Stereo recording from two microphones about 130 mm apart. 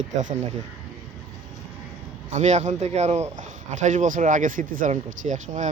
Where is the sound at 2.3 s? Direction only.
65° right (ahead or behind).